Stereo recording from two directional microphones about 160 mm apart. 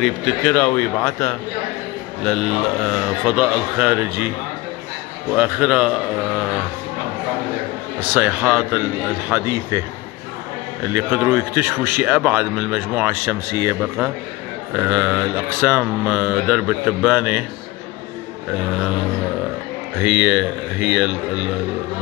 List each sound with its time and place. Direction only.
0.0 s a man's voice: 5° left (ahead or behind)
5.3 s a man's voice: 10° right (ahead or behind)
8.1 s a man's voice: 10° right (ahead or behind)
10.9 s a man's voice: 15° right (ahead or behind)
20.0 s a man's voice: 10° right (ahead or behind)